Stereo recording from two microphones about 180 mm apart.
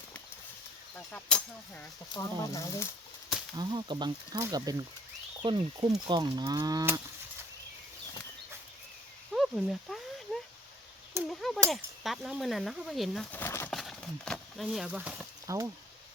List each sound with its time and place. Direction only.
0.9 s speech: 5° left (ahead or behind)
2.1 s speech: 15° left (ahead or behind)
3.5 s speech: 25° right (ahead or behind)
9.3 s a sound: centre (ahead or behind)
11.3 s speech: centre (ahead or behind)
13.4 s speech: 15° left (ahead or behind)
13.7 s speech: centre (ahead or behind); by 15.7 s 15° right (ahead or behind)